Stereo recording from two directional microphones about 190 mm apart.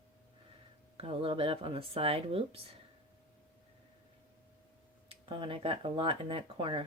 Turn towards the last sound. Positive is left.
turn(degrees=-30)  # may be behind; listen again after turning